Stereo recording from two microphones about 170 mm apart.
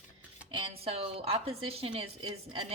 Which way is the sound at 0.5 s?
30° right (ahead or behind).